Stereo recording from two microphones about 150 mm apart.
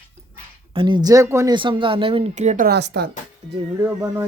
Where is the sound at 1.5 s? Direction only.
35° right (ahead or behind); by 2.6 s 50° right (ahead or behind).